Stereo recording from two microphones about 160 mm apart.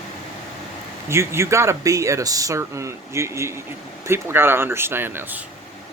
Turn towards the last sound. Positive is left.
turn(degrees=-10)  # may be behind; listen again after turning